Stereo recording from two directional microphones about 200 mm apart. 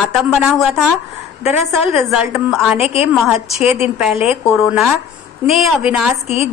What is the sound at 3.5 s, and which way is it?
Speech, 30° left (ahead or behind).